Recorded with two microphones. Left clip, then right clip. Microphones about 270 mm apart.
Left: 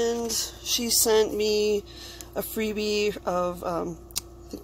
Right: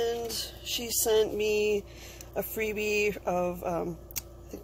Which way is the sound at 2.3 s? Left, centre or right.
Left.